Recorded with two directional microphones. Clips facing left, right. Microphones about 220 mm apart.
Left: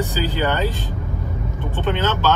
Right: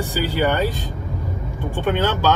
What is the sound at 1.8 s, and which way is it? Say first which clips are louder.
Speech: right 1 dB; 10° right (ahead or behind).